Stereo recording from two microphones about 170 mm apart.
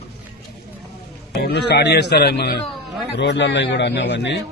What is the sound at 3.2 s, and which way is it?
A man's voice, 90° left.